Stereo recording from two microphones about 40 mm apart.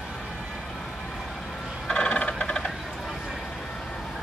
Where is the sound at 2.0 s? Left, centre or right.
Left.